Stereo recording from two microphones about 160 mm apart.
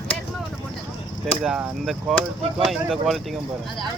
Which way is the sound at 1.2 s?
Centre (ahead or behind).